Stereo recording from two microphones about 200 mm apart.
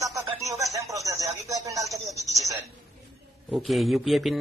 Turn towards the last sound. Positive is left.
turn(degrees=0)  # may be behind; listen again after turning